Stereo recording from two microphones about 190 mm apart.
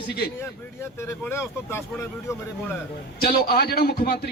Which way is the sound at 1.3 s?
15° left (ahead or behind).